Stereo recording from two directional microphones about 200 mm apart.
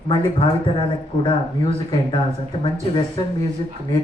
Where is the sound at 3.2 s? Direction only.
20° left (ahead or behind).